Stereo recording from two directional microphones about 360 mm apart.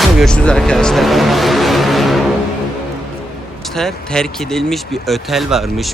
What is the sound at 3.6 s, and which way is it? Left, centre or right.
Speech, centre.